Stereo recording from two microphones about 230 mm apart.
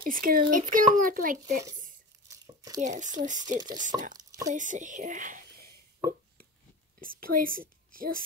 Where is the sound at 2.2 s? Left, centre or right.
Centre.